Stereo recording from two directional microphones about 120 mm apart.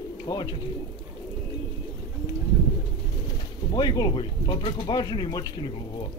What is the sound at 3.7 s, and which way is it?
Speech, 40° left (ahead or behind).